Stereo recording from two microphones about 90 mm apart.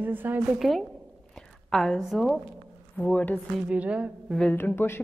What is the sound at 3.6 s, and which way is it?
Speech, 15° right (ahead or behind).